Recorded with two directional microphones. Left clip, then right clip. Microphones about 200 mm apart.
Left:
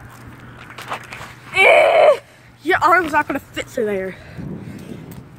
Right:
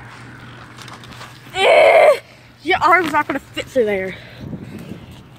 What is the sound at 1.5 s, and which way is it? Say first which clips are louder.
Groan: right 1 dB; 25° right (ahead or behind).